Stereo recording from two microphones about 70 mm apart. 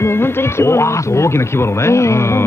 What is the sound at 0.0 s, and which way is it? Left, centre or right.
Speech, left.